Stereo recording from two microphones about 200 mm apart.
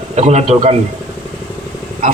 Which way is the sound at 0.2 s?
35° right (ahead or behind).